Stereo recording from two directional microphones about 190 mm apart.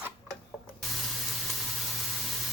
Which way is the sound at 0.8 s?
Centre (ahead or behind).